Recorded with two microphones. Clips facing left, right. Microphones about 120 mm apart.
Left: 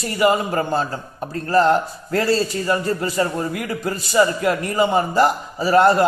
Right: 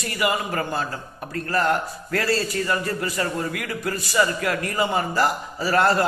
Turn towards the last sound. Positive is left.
turn(degrees=20)  # may be behind; listen again after turning